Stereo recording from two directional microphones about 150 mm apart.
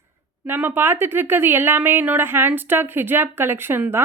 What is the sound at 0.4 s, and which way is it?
Speech, 15° right (ahead or behind).